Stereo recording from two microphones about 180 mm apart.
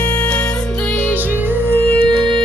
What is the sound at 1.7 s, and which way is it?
Music, 10° left (ahead or behind).